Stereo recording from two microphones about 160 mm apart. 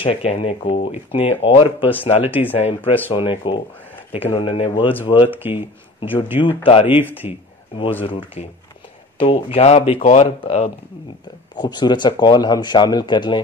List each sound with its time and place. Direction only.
0.0 s speech: 40° left (ahead or behind)
5.3 s speech: 10° right (ahead or behind)
6.6 s speech: 35° left (ahead or behind)
11.5 s speech: 25° left (ahead or behind)